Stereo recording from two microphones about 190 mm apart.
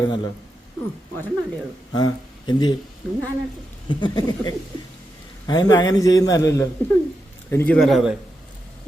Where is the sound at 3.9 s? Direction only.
25° left (ahead or behind); by 8.1 s centre (ahead or behind).